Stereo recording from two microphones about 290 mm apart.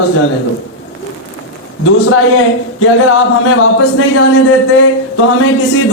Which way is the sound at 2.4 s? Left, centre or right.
Left.